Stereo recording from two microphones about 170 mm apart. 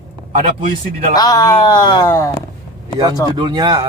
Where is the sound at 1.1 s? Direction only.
20° left (ahead or behind).